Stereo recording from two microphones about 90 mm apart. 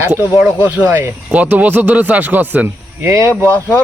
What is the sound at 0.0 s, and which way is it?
Speech, 20° right (ahead or behind).